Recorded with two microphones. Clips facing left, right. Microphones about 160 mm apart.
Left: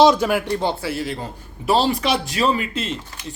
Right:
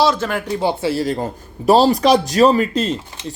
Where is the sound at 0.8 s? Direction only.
30° right (ahead or behind).